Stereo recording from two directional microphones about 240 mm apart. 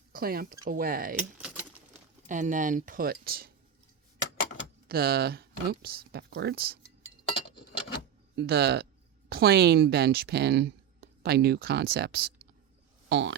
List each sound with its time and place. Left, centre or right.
0.1 s speech: right
1.4 s a sound: centre
2.2 s speech: right
4.9 s speech: right
7.5 s a sound: centre
8.4 s speech: right